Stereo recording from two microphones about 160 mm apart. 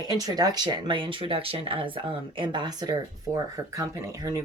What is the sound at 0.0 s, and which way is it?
Speech, 25° right (ahead or behind).